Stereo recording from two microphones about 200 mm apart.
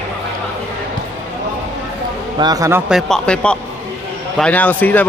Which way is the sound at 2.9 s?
Centre (ahead or behind).